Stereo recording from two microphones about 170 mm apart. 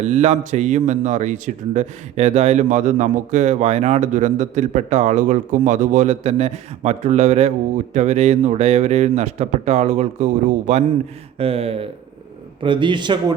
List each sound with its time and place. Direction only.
0.0 s a man's voice: 40° right (ahead or behind)